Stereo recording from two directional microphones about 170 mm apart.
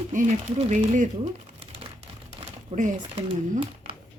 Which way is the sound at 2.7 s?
45° right (ahead or behind).